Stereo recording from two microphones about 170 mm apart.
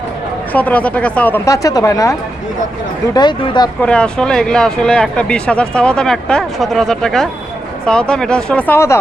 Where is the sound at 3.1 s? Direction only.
25° left (ahead or behind).